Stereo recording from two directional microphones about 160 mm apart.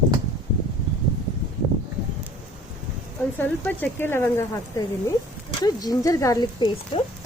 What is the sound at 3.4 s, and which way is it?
Speech, 10° left (ahead or behind).